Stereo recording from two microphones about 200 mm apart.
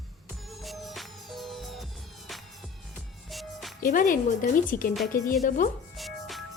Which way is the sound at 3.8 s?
40° left (ahead or behind).